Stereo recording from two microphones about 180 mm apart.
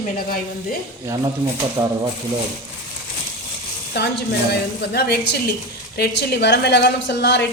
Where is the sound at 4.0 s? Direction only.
65° left (ahead or behind).